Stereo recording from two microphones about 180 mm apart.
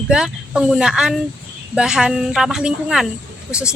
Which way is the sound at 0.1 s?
5° right (ahead or behind).